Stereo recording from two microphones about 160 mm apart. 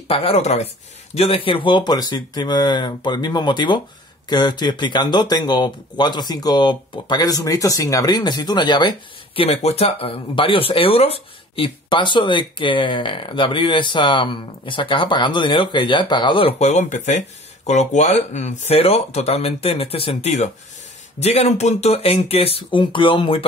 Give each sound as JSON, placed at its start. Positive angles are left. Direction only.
{"t": 0.1, "sound": "speech", "side_deg": 40}